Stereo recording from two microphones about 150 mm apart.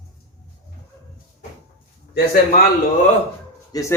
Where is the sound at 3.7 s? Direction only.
20° left (ahead or behind).